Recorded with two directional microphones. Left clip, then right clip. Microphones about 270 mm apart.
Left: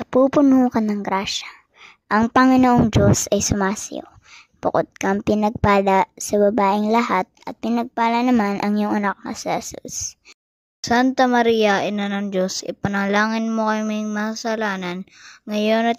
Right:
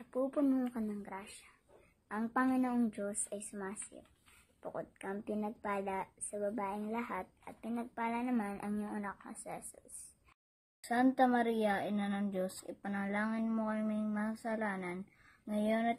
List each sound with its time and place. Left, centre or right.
0.1 s speech: left
10.8 s speech: left